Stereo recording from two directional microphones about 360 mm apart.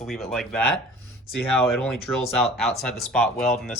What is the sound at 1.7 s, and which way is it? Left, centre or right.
Speech, centre.